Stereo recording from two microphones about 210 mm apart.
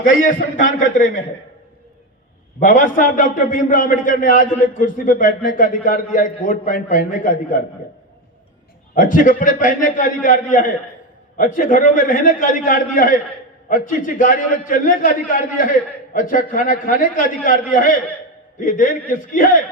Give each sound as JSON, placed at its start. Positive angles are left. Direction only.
{"t": 0.0, "sound": "a man's voice", "side_deg": 40}
{"t": 2.6, "sound": "a man's voice", "side_deg": 40}
{"t": 9.0, "sound": "a man's voice", "side_deg": 40}